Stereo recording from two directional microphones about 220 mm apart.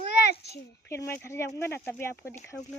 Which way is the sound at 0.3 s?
50° left (ahead or behind).